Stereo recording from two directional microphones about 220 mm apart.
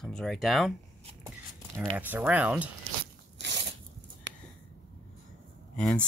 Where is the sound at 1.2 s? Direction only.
10° right (ahead or behind).